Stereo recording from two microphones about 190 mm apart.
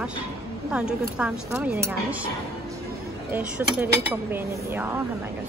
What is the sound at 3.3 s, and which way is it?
Speech, 10° right (ahead or behind).